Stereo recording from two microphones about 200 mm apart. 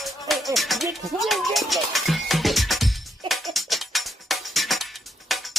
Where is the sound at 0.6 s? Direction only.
Centre (ahead or behind).